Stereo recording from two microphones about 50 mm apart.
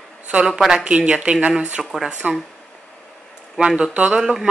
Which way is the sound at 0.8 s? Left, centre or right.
Right.